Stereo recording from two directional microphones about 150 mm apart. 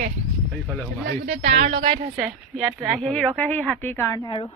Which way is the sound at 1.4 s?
50° right (ahead or behind).